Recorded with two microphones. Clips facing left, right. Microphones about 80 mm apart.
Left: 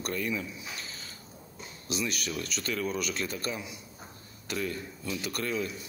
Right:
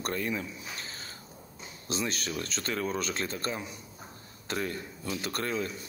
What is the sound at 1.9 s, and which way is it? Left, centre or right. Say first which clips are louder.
Speech: even; right.